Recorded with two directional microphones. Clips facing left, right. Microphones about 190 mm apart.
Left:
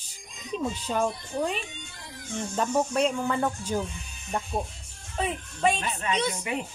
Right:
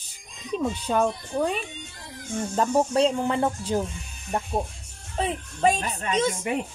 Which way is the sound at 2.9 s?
25° right (ahead or behind).